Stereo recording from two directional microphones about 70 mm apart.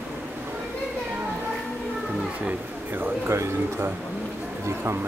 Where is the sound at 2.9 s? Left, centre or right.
Right.